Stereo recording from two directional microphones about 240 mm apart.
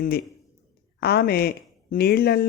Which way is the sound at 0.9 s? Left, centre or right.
Left.